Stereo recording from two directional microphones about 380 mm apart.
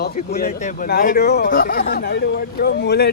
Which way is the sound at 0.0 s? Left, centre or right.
Left.